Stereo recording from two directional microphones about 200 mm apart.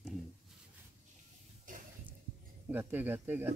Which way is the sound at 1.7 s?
40° right (ahead or behind).